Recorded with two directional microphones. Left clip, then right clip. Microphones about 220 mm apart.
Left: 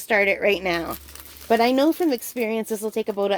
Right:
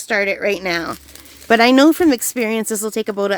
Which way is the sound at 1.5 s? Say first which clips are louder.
Right 7 dB; 35° right (ahead or behind).